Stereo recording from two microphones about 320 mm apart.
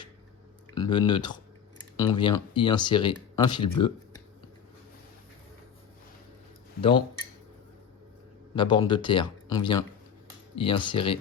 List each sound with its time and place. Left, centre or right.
0.7 s speech: centre
8.5 s speech: centre